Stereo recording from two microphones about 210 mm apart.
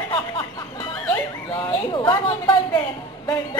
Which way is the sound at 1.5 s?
25° left (ahead or behind).